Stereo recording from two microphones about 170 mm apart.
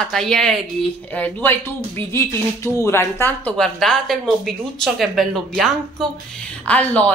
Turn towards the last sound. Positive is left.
turn(degrees=10)  # may be behind; listen again after turning